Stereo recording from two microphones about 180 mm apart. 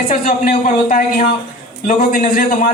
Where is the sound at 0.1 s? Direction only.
50° left (ahead or behind).